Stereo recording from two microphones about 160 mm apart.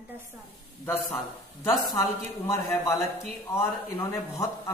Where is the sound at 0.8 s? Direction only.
15° left (ahead or behind).